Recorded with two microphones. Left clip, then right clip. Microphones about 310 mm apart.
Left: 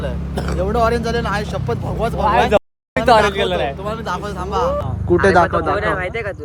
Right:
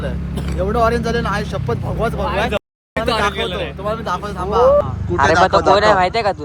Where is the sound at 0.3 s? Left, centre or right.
Left.